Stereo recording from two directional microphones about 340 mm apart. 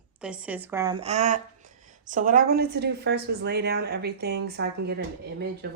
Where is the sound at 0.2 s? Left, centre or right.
Centre.